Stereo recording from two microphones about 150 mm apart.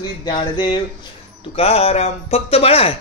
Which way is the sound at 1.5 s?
40° left (ahead or behind).